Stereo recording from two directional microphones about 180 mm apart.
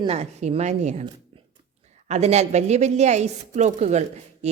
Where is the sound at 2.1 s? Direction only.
35° right (ahead or behind).